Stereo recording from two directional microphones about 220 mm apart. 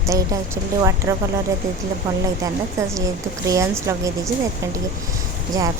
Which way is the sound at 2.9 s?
15° right (ahead or behind).